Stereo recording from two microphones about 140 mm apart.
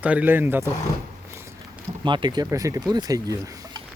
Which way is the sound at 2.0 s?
35° right (ahead or behind).